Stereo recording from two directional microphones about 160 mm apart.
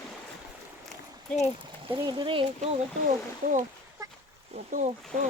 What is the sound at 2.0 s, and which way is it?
Speech, 30° right (ahead or behind).